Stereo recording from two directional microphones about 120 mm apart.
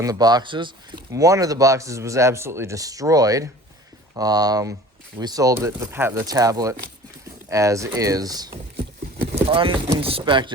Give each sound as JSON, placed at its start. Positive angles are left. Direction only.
{"t": 0.0, "sound": "speech", "side_deg": -30}
{"t": 1.1, "sound": "speech", "side_deg": -25}
{"t": 6.2, "sound": "speech", "side_deg": -30}
{"t": 9.3, "sound": "clip-clop", "side_deg": -50}
{"t": 10.0, "sound": "speech", "side_deg": -50}